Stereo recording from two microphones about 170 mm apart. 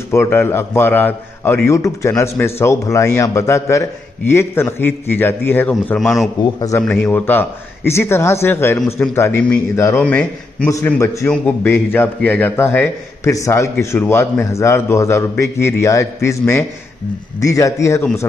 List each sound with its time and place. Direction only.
0.1 s a man's voice: 15° left (ahead or behind)
5.9 s a man's voice: centre (ahead or behind)
6.4 s a man's voice: 20° left (ahead or behind)
6.8 s a man's voice: 5° left (ahead or behind)